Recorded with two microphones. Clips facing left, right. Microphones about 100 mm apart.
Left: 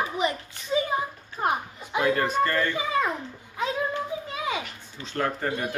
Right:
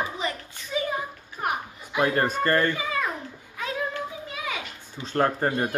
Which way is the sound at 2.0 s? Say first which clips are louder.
Even; 40° right (ahead or behind).